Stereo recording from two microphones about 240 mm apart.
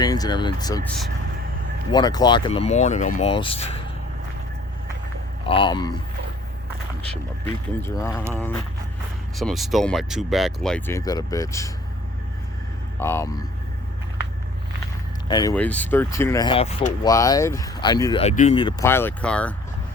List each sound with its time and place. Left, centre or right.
0.0 s speech: centre
1.9 s speech: centre
5.5 s speech: left
7.4 s speech: centre
9.4 s speech: centre
13.0 s speech: centre
15.3 s speech: centre
15.5 s speech: centre; by 17.1 s left
17.1 s speech: centre
18.9 s speech: centre